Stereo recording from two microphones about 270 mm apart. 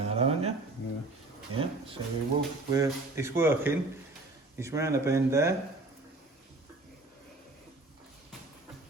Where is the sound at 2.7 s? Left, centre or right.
Centre.